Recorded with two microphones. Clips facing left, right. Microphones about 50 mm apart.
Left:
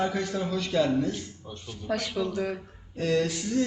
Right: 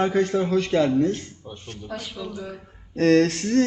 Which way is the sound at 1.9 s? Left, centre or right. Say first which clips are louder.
Left 4 dB; left.